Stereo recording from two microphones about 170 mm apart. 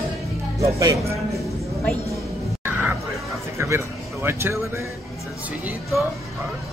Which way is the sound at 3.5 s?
15° right (ahead or behind).